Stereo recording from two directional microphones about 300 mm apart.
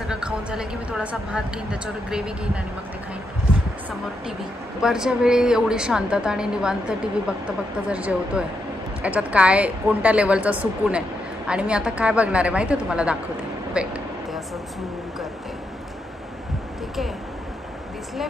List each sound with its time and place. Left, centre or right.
0.1 s a woman's voice: centre
4.8 s a woman's voice: centre